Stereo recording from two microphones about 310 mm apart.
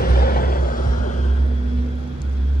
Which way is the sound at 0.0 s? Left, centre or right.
Left.